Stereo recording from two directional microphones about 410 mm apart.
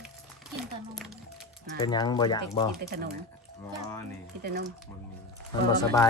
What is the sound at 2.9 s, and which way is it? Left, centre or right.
Speech, right.